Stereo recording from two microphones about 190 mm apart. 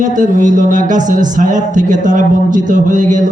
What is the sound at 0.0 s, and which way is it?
Speech, 40° right (ahead or behind).